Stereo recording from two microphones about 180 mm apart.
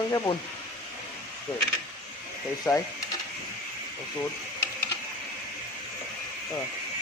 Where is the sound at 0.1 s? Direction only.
20° left (ahead or behind).